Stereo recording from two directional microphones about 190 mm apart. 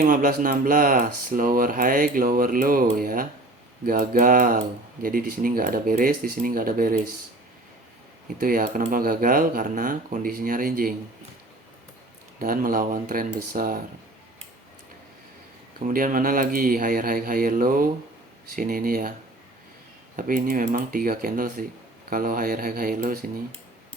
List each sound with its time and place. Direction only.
0.0 s speech: 45° right (ahead or behind)
8.4 s speech: 50° right (ahead or behind)
12.4 s speech: 50° right (ahead or behind)
15.9 s speech: 45° right (ahead or behind)
20.1 s speech: 45° right (ahead or behind)